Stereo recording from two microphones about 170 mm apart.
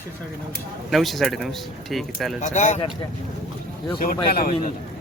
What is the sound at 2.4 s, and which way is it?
Speech, 45° left (ahead or behind).